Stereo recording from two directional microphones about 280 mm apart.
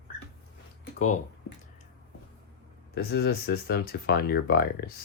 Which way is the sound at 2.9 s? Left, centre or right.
Left.